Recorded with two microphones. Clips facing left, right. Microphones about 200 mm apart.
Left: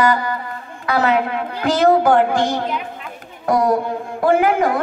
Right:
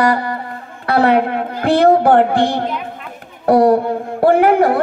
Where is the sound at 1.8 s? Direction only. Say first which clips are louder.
Right 2 dB; 30° right (ahead or behind).